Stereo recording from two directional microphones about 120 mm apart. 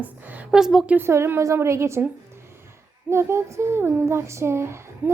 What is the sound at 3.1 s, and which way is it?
Speech, 20° right (ahead or behind).